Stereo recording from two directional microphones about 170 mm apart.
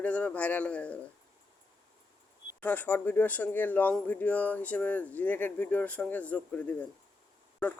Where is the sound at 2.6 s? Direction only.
10° left (ahead or behind).